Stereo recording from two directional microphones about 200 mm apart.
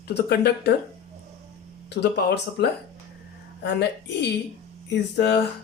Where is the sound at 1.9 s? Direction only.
55° left (ahead or behind).